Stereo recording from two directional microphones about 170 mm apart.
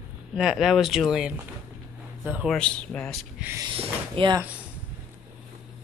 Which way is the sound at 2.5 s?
5° left (ahead or behind).